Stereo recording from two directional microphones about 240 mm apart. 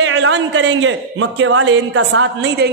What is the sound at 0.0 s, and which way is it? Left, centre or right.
A man's voice, right.